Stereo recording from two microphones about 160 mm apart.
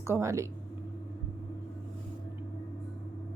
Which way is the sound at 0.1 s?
20° right (ahead or behind).